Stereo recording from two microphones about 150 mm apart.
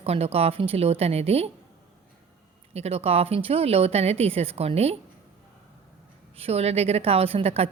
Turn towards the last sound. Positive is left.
turn(degrees=-40)  # may be behind; listen again after turning